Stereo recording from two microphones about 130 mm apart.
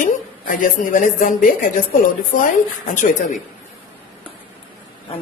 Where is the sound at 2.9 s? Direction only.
85° left.